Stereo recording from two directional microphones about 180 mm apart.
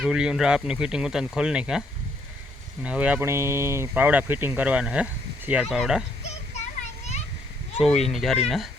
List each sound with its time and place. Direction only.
0.0 s speech: 5° right (ahead or behind)
2.8 s speech: 5° right (ahead or behind)
6.2 s a sound: 40° left (ahead or behind)
8.0 s speech: centre (ahead or behind)